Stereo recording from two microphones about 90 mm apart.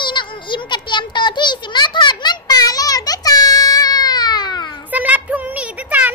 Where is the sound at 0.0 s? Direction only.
60° left (ahead or behind).